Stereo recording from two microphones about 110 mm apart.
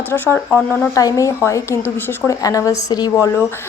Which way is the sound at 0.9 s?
30° left (ahead or behind).